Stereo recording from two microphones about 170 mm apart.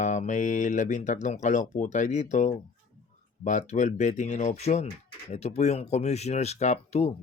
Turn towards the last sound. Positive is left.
turn(degrees=40)  # may be behind; listen again after turning